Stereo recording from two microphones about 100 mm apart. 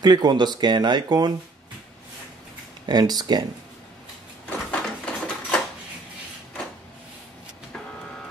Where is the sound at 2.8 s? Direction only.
40° right (ahead or behind).